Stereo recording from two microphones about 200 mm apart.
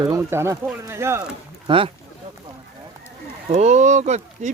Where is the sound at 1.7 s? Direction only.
25° right (ahead or behind).